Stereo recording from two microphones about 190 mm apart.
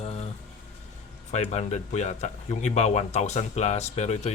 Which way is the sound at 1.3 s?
35° left (ahead or behind).